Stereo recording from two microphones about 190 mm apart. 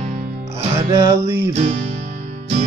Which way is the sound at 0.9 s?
20° right (ahead or behind).